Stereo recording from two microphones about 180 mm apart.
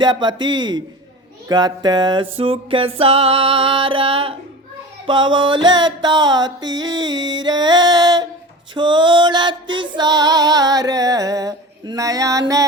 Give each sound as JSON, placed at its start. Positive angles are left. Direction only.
{"t": 0.0, "sound": "music", "side_deg": -25}